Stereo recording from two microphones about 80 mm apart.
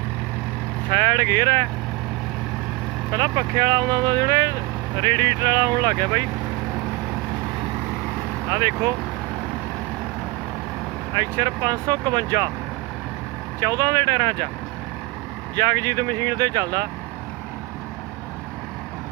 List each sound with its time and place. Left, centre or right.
0.9 s speech: right
3.1 s speech: right
8.4 s speech: right
11.1 s speech: right
13.6 s speech: right
15.5 s speech: right